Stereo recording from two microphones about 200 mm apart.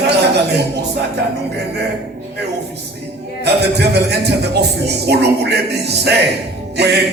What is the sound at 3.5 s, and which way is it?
Music, 55° right (ahead or behind).